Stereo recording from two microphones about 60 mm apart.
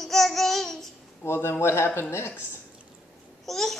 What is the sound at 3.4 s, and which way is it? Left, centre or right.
Speech, centre.